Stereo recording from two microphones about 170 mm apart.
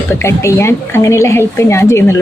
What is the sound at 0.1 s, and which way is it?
A woman's voice, 15° left (ahead or behind).